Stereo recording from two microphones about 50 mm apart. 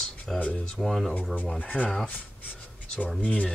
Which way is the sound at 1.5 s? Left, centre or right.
Left.